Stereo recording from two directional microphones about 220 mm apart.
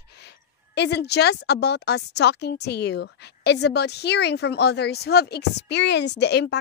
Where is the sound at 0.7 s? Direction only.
50° left (ahead or behind).